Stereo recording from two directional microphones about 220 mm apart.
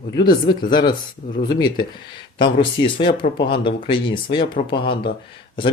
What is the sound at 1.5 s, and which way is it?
Speech, 20° left (ahead or behind).